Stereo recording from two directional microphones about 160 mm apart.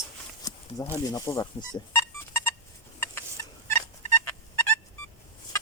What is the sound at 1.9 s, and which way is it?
Music, 15° left (ahead or behind).